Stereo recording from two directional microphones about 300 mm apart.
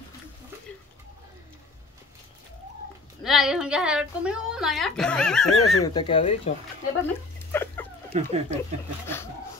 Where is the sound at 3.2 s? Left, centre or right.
Centre.